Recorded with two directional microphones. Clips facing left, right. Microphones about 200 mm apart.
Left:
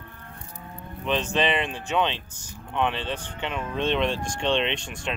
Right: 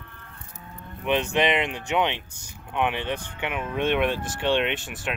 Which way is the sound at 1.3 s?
15° right (ahead or behind).